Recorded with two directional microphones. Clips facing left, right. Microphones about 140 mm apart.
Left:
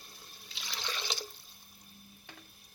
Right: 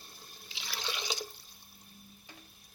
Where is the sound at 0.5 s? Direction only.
5° right (ahead or behind).